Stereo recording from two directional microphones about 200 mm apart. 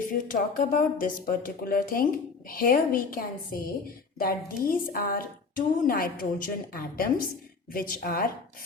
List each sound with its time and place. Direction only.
0.1 s a woman's voice: 45° left (ahead or behind)